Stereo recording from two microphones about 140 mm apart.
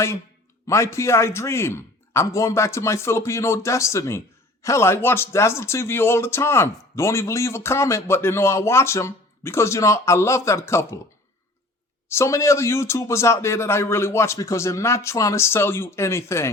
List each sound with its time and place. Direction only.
0.7 s speech: 20° left (ahead or behind)
12.0 s speech: 20° left (ahead or behind)